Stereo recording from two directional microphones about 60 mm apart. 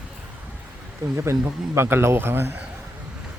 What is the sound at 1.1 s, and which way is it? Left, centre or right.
Speech, right.